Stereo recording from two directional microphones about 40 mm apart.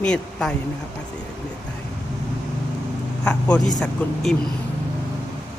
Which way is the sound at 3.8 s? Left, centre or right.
Centre.